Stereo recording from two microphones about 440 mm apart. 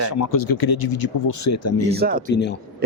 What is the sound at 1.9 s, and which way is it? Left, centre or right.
Speech, centre.